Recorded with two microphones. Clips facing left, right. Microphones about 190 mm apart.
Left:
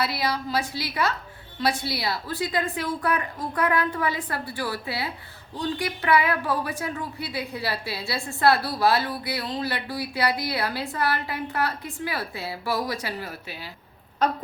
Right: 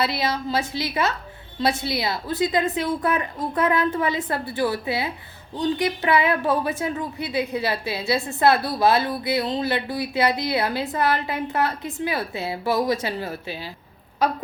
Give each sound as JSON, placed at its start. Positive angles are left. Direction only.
{"t": 0.0, "sound": "a woman's voice", "side_deg": -25}